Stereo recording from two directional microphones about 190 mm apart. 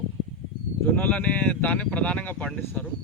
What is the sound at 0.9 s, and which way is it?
Speech, 10° left (ahead or behind).